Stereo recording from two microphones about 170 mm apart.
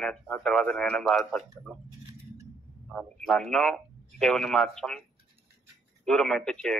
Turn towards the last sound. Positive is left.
turn(degrees=5)  # may be behind; listen again after turning